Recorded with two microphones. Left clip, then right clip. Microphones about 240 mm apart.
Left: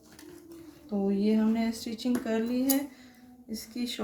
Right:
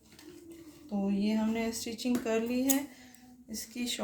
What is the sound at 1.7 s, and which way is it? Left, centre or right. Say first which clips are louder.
Speech: left 1 dB; right.